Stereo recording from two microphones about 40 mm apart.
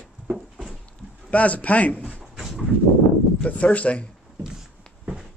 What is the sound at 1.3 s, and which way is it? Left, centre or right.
Speech, left.